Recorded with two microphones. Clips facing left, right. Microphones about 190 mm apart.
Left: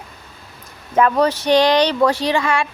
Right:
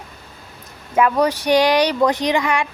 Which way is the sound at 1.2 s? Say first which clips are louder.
Left 1 dB; 15° right (ahead or behind).